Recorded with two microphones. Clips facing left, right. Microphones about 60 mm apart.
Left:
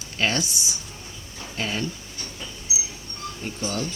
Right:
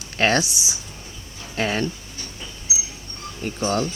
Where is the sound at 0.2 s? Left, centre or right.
Right.